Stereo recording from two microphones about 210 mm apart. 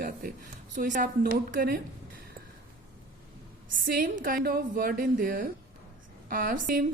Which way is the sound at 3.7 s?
40° right (ahead or behind).